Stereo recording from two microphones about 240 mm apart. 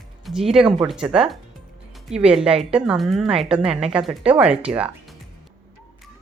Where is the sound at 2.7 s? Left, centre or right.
Centre.